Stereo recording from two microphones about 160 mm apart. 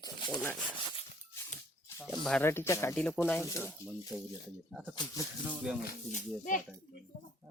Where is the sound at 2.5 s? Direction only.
15° left (ahead or behind).